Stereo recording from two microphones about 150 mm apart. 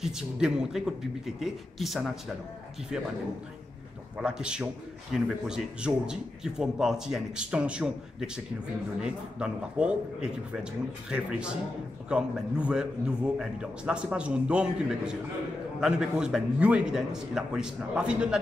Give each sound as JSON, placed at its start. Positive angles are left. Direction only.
{"t": 0.0, "sound": "speech", "side_deg": -5}
{"t": 4.2, "sound": "a man's voice", "side_deg": -5}